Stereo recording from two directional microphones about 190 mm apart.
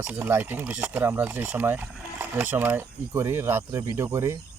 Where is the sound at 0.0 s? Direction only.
10° right (ahead or behind).